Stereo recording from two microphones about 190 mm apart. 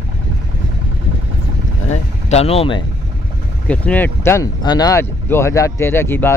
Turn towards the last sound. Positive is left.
turn(degrees=10)  # may be behind; listen again after turning